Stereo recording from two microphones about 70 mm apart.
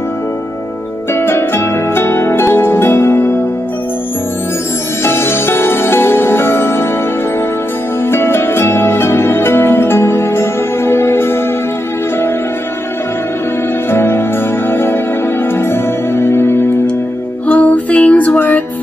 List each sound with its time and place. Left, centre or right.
1.1 s harp: left
5.0 s music: left
8.0 s music: left
13.8 s music: left
17.5 s music: centre